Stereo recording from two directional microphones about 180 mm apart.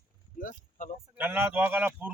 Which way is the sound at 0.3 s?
50° left (ahead or behind).